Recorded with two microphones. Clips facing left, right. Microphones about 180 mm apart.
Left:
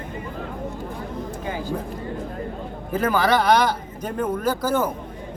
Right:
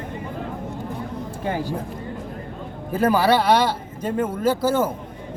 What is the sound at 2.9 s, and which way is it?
Speech, 30° right (ahead or behind).